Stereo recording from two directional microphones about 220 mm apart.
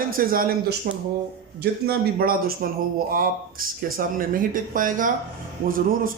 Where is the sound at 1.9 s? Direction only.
40° right (ahead or behind).